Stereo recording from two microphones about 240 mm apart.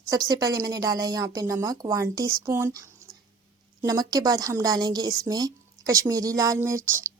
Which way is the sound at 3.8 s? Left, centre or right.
Centre.